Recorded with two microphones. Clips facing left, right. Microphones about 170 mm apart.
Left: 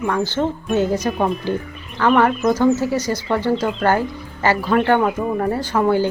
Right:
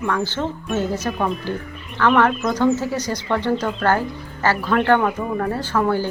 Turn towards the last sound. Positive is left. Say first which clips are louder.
# left 3 dB
turn(degrees=15)  # may be behind; listen again after turning